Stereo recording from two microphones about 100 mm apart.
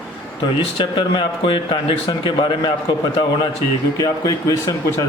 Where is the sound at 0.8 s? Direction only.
55° left (ahead or behind).